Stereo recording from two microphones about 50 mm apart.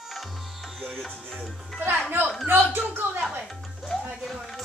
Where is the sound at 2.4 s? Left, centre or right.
Right.